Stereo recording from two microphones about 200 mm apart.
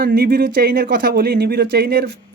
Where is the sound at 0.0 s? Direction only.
50° right (ahead or behind).